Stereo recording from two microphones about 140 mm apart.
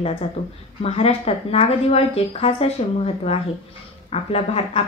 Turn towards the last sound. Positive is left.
turn(degrees=45)  # may be behind; listen again after turning